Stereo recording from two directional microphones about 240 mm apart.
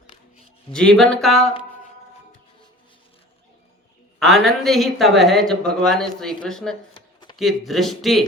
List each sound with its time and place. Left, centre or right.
0.7 s a woman's voice: centre
4.2 s a woman's voice: centre
6.9 s a sound: centre
7.3 s a woman's voice: centre